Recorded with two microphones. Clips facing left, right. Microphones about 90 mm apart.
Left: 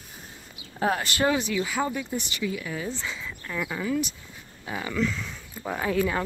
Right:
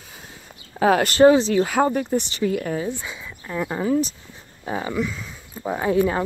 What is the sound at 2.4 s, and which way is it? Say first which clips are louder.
Speech: right 7 dB; 50° right (ahead or behind).